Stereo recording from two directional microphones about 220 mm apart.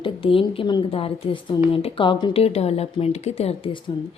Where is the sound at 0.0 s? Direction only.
25° left (ahead or behind).